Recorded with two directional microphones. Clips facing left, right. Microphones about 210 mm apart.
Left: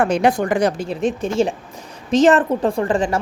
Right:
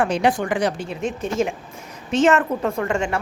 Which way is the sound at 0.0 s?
45° left (ahead or behind).